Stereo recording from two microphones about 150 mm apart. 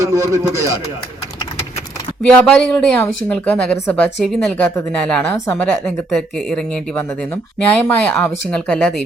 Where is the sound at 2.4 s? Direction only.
10° left (ahead or behind).